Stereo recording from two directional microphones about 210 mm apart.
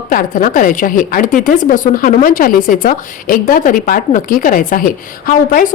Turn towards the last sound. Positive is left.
turn(degrees=40)  # may be behind; listen again after turning